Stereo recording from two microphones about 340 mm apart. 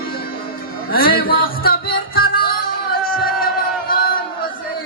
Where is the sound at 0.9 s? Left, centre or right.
Left.